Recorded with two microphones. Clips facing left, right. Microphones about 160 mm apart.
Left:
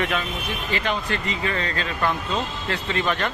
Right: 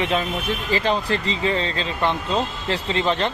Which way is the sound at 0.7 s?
30° right (ahead or behind).